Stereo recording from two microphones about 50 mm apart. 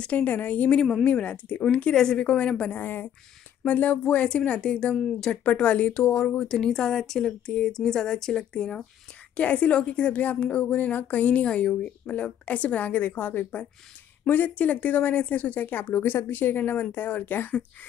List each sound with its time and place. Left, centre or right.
0.0 s a woman's voice: left
2.7 s a woman's voice: left; by 4.9 s centre
4.9 s speech: centre
5.3 s a woman's voice: left